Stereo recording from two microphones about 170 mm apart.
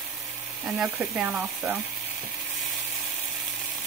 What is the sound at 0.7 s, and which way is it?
Speech, 5° right (ahead or behind).